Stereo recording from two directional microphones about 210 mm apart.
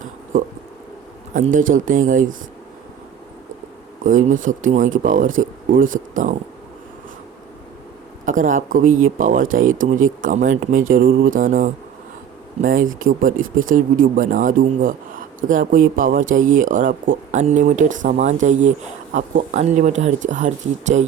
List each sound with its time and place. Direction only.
1.5 s speech: 40° right (ahead or behind)
4.0 s speech: 35° right (ahead or behind)
8.2 s speech: 40° right (ahead or behind)
13.3 s speech: 70° right (ahead or behind)
13.7 s speech: 40° right (ahead or behind)